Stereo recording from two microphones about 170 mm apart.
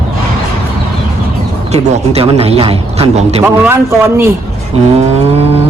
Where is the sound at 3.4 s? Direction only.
15° right (ahead or behind).